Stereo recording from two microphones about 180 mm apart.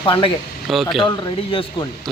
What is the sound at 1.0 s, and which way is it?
Speech, 30° left (ahead or behind).